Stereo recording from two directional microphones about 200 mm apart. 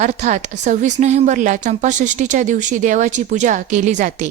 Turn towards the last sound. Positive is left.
turn(degrees=-40)  # may be behind; listen again after turning